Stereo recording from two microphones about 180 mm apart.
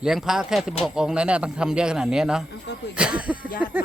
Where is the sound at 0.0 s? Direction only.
5° right (ahead or behind).